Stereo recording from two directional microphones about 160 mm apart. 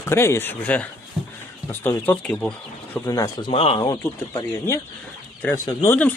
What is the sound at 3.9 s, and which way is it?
Speech, 20° left (ahead or behind).